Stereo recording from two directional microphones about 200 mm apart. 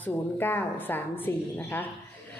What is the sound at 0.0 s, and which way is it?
A woman's voice, 10° left (ahead or behind).